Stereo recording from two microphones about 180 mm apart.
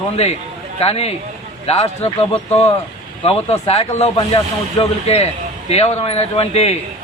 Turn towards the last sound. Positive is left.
turn(degrees=35)  # may be behind; listen again after turning